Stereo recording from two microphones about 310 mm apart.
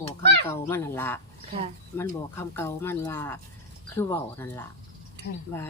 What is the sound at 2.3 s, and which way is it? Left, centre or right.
Speech, centre.